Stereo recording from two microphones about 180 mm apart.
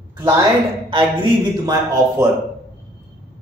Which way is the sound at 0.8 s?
25° right (ahead or behind).